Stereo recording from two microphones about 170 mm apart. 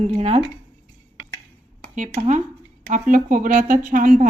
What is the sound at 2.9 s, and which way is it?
Speech, 50° right (ahead or behind).